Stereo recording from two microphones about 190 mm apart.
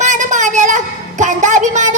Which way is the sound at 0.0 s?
40° right (ahead or behind).